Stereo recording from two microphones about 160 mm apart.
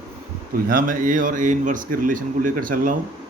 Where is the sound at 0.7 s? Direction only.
60° right (ahead or behind).